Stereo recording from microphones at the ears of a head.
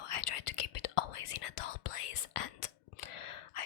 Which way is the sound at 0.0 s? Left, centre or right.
Left.